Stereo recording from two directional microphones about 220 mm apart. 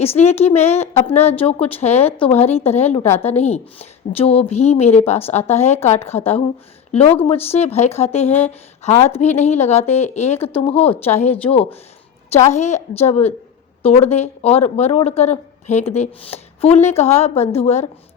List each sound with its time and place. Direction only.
0.0 s a woman's voice: 30° left (ahead or behind)